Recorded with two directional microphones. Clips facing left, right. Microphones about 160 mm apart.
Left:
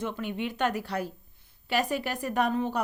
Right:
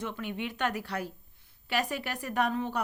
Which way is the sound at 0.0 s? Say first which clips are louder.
Left 3 dB; 40° left (ahead or behind).